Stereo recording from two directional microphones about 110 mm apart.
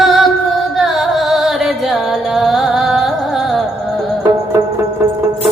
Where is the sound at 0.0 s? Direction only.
Centre (ahead or behind).